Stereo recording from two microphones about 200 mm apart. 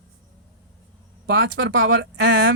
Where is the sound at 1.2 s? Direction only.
60° right (ahead or behind).